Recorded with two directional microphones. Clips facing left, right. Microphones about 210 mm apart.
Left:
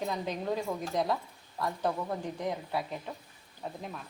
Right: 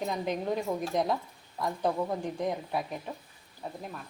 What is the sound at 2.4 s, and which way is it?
Speech, 15° right (ahead or behind).